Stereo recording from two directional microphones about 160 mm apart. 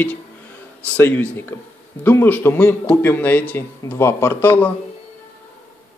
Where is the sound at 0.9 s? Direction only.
10° left (ahead or behind).